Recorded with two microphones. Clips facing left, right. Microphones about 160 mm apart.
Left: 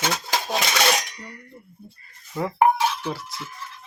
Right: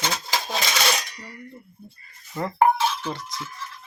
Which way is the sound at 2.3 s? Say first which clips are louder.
Left 2 dB; 5° left (ahead or behind).